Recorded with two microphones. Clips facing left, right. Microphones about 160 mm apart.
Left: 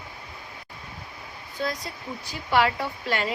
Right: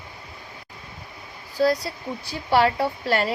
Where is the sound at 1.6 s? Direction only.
35° right (ahead or behind).